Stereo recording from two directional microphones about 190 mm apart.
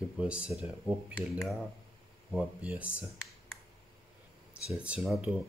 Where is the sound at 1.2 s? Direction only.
Centre (ahead or behind).